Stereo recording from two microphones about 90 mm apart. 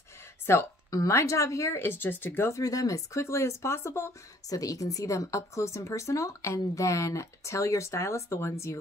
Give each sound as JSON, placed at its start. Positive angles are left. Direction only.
{"t": 0.5, "sound": "speech", "side_deg": 30}
{"t": 2.5, "sound": "speech", "side_deg": 40}